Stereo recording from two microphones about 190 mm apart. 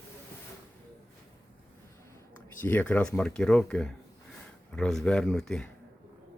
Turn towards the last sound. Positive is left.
turn(degrees=5)  # may be behind; listen again after turning